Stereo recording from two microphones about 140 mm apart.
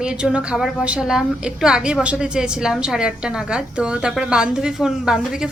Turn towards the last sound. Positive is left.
turn(degrees=-5)  # may be behind; listen again after turning